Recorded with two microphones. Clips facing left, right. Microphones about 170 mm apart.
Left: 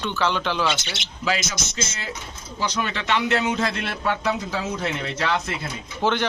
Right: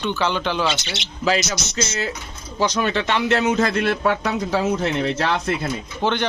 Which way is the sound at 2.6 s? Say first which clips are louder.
Right 6 dB; 45° right (ahead or behind).